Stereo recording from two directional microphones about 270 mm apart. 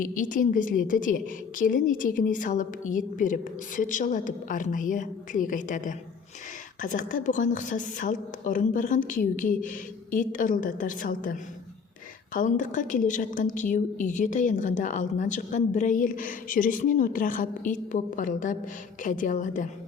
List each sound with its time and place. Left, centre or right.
0.0 s a woman's voice: left